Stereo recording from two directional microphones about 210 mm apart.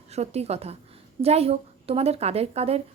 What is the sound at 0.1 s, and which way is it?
Speech, 30° right (ahead or behind).